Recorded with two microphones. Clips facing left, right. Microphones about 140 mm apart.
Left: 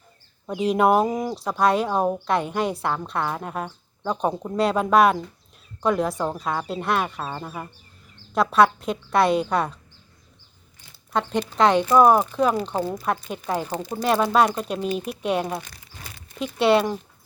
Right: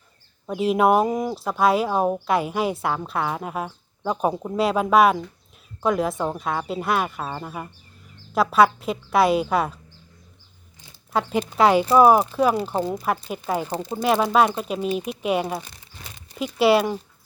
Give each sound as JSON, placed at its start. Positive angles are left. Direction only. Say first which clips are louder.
{"t": 0.4, "sound": "speech", "louder": "right 1 dB", "side_deg": 0}
{"t": 11.1, "sound": "speech", "louder": "right 1 dB", "side_deg": -5}
{"t": 15.6, "sound": "crumpling", "louder": "even", "side_deg": -20}
{"t": 16.4, "sound": "speech", "louder": "right 1 dB", "side_deg": -5}